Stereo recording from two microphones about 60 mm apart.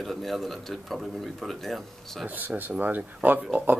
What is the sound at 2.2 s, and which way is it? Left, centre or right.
Speech, right.